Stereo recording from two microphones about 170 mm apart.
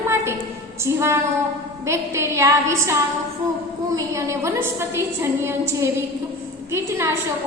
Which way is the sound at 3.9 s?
15° right (ahead or behind).